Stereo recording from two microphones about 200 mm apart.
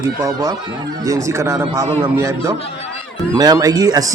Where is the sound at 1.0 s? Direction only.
15° right (ahead or behind).